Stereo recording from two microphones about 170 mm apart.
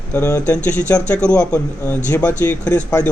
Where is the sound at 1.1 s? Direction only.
5° left (ahead or behind).